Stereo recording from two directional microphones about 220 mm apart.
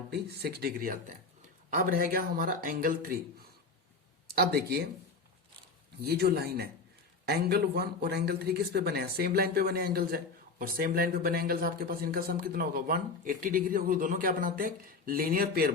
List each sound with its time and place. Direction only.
0.1 s speech: 45° right (ahead or behind)
4.4 s speech: 45° right (ahead or behind)
6.1 s speech: 45° right (ahead or behind)